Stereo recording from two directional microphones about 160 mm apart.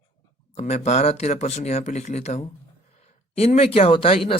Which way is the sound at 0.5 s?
45° left (ahead or behind).